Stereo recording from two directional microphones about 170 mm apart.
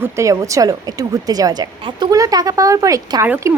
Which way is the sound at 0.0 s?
20° right (ahead or behind).